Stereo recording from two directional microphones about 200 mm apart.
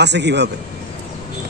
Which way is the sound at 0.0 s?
60° right (ahead or behind).